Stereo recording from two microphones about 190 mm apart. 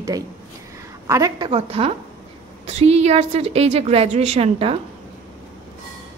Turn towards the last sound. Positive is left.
turn(degrees=-35)  # may be behind; listen again after turning